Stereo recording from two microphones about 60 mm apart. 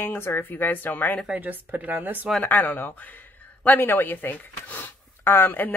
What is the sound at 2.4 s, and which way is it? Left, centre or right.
Speech, left.